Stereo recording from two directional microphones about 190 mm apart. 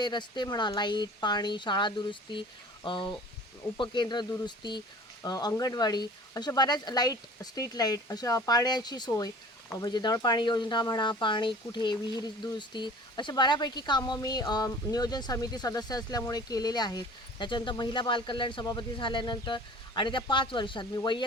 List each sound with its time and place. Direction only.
0.0 s speech: 25° left (ahead or behind)